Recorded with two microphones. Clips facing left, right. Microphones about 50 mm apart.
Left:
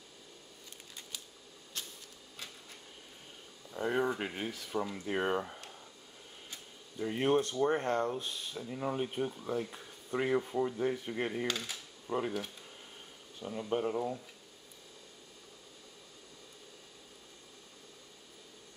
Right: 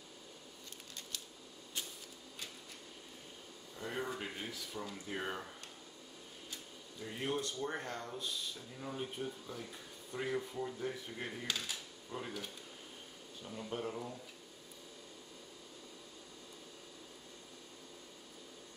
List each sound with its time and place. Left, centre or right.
3.7 s speech: left
7.0 s speech: left
12.1 s speech: left